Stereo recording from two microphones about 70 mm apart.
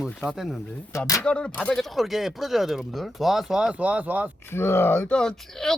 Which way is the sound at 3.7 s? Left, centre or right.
Centre.